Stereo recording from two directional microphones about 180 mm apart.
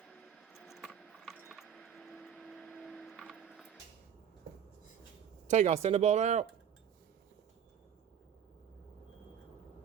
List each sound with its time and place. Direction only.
0.1 s keys jangling: centre (ahead or behind)
5.5 s speech: 40° right (ahead or behind)